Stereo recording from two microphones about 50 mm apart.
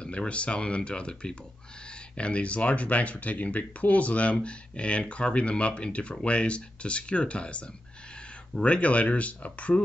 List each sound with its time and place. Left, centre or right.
0.0 s speech: left